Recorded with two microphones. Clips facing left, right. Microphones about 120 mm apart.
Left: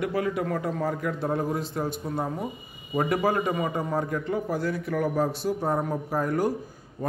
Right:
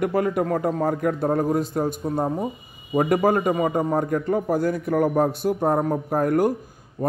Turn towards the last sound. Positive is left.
turn(degrees=-45)  # may be behind; listen again after turning